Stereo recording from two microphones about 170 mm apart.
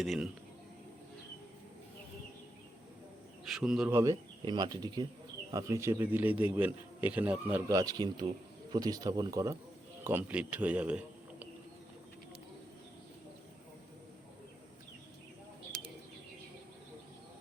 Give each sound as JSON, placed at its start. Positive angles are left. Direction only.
{"t": 0.0, "sound": "speech", "side_deg": 0}
{"t": 3.4, "sound": "speech", "side_deg": -5}
{"t": 3.9, "sound": "speech", "side_deg": -20}